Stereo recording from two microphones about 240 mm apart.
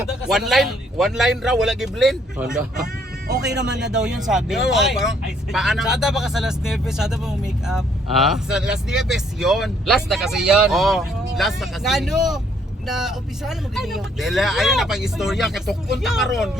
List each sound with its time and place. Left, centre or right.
0.0 s speech: centre
3.2 s speech: right
3.5 s speech: centre